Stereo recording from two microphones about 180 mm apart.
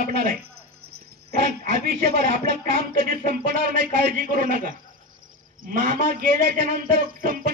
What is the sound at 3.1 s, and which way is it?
Speech, 55° right (ahead or behind).